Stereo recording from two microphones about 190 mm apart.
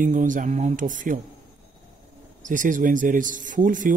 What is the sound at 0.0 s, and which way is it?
A man's voice, 40° right (ahead or behind).